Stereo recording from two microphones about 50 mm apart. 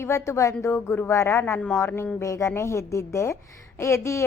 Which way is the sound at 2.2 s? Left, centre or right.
Left.